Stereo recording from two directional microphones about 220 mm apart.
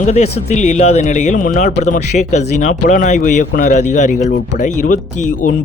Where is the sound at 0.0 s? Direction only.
30° left (ahead or behind).